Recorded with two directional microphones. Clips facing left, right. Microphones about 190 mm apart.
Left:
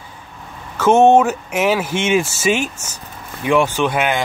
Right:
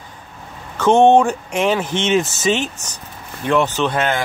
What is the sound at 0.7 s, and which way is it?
Speech, 5° left (ahead or behind).